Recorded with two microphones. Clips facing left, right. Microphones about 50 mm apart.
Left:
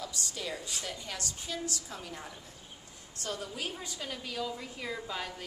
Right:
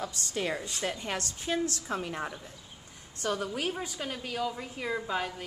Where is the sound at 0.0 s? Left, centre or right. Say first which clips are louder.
Right 6 dB; right.